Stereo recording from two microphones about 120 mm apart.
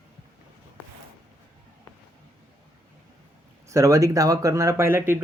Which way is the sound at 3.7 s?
25° right (ahead or behind).